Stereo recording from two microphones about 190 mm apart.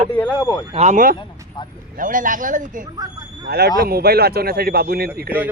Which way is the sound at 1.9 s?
45° right (ahead or behind).